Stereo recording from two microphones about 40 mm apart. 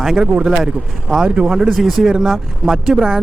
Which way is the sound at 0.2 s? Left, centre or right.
Right.